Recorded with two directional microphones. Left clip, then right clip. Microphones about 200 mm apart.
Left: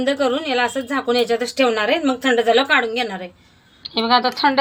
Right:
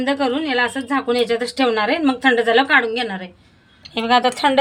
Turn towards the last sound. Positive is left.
turn(degrees=-15)  # may be behind; listen again after turning